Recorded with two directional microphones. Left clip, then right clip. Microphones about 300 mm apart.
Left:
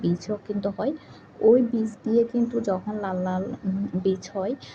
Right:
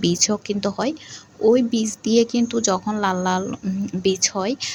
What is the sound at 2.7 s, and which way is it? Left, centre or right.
Speech, right.